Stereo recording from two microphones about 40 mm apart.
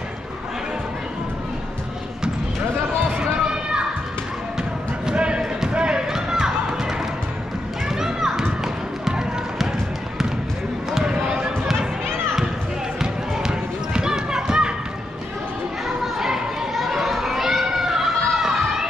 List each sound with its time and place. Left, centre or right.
3.1 s run: right
5.1 s basketball bounce: right
8.0 s children playing: centre
10.9 s basketball bounce: centre
13.0 s basketball bounce: centre
16.0 s children playing: centre